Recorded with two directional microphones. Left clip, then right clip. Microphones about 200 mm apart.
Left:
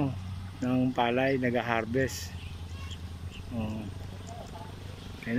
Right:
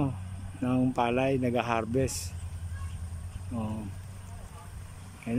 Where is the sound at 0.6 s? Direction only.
5° right (ahead or behind).